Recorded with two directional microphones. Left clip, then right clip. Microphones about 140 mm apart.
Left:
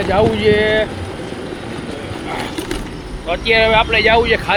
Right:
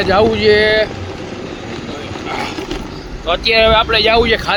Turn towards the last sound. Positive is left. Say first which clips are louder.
# right 1 dB
turn(degrees=-30)  # may be behind; listen again after turning